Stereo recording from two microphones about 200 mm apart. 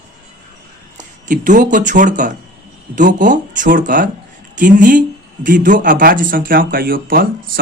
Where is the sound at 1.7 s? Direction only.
40° right (ahead or behind).